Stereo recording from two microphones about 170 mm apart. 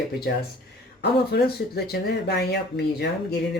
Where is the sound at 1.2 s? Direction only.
70° left (ahead or behind).